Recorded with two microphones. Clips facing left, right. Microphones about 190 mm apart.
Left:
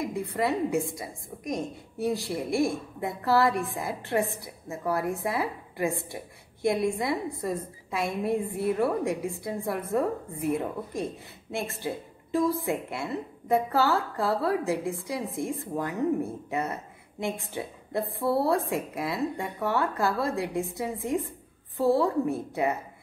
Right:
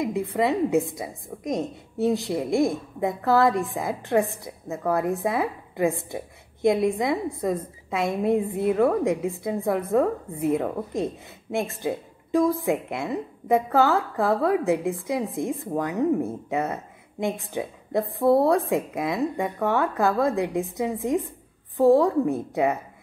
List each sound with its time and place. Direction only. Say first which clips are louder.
0.4 s a woman's voice: right 4 dB; 20° right (ahead or behind)